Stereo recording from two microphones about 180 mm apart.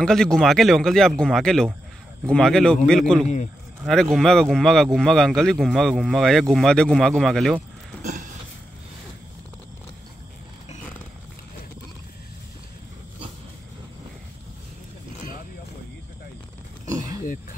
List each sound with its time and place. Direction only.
0.0 s speech: 5° left (ahead or behind)
8.0 s a sound: 45° right (ahead or behind)
16.9 s roaring cats: 20° right (ahead or behind)